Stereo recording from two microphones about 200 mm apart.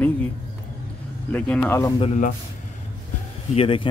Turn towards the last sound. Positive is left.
turn(degrees=25)  # may be behind; listen again after turning